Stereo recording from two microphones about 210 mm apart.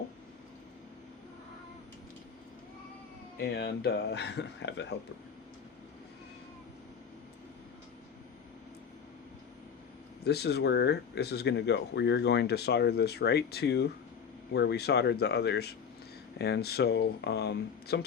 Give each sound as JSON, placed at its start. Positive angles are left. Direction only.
{"t": 3.4, "sound": "speech", "side_deg": 50}
{"t": 10.2, "sound": "speech", "side_deg": 50}